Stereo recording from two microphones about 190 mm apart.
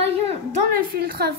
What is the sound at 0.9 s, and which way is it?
Speech, 55° right (ahead or behind).